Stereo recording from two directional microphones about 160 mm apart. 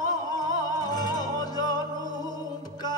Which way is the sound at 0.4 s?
25° left (ahead or behind).